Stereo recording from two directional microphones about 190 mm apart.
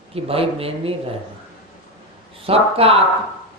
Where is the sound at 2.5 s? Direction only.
30° right (ahead or behind).